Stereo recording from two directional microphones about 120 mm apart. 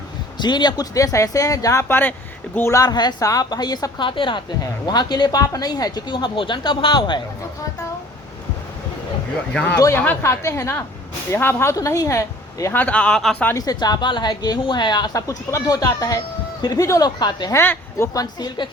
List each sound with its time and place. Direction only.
0.3 s speech: 40° left (ahead or behind); by 2.8 s 20° left (ahead or behind)
2.8 s a woman's voice: 35° left (ahead or behind)
9.5 s speech: 10° left (ahead or behind)
9.7 s speech: 25° left (ahead or behind)
12.7 s speech: 10° left (ahead or behind)
13.5 s a woman's voice: 30° left (ahead or behind)
17.5 s speech: 20° left (ahead or behind)
18.1 s a woman's voice: 30° left (ahead or behind)